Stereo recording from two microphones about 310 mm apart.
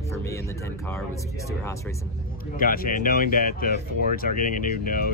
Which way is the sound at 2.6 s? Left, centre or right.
Left.